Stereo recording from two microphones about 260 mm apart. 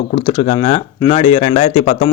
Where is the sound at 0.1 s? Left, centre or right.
Left.